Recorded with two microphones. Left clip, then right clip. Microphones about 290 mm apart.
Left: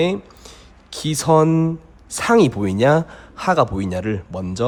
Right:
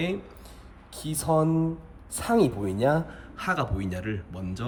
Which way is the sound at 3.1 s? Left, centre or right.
Centre.